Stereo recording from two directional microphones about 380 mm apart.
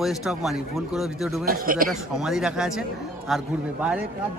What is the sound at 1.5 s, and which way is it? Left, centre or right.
Speech, right.